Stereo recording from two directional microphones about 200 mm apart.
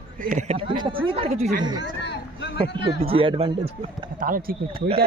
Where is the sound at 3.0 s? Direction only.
30° right (ahead or behind).